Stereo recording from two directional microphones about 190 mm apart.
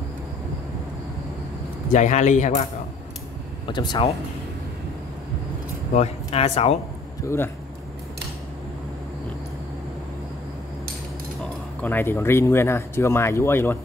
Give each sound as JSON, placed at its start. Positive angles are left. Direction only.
{"t": 1.9, "sound": "speech", "side_deg": 40}
{"t": 3.6, "sound": "speech", "side_deg": 25}
{"t": 5.9, "sound": "speech", "side_deg": 35}
{"t": 7.2, "sound": "speech", "side_deg": 10}
{"t": 11.8, "sound": "speech", "side_deg": 10}